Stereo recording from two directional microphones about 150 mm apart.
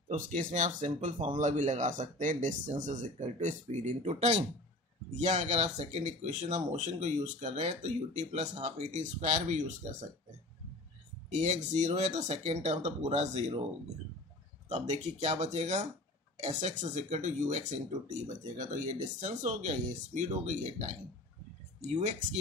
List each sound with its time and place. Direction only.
0.5 s speech: 55° right (ahead or behind)
11.2 s speech: 50° right (ahead or behind)
14.7 s speech: 50° right (ahead or behind)